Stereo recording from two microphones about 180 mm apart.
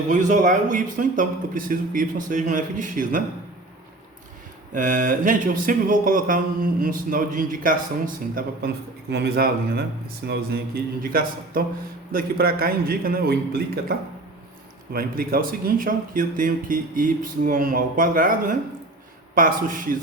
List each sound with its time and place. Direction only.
0.1 s speech: 45° right (ahead or behind)
4.7 s a man's voice: 50° right (ahead or behind)
14.9 s speech: 55° right (ahead or behind)